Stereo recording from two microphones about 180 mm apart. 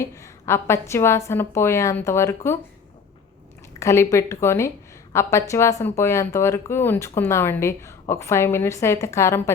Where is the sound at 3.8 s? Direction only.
15° left (ahead or behind).